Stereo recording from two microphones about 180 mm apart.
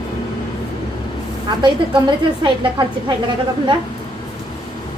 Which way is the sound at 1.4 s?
25° right (ahead or behind).